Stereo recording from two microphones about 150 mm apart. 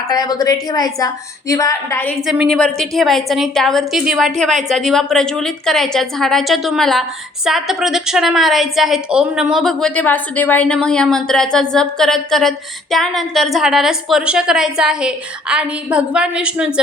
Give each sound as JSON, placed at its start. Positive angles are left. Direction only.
{"t": 0.1, "sound": "a woman's voice", "side_deg": 25}
{"t": 2.2, "sound": "a woman's voice", "side_deg": 0}